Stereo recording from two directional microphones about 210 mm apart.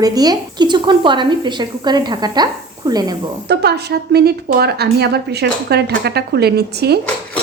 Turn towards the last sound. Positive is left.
turn(degrees=-50)  # may be behind; listen again after turning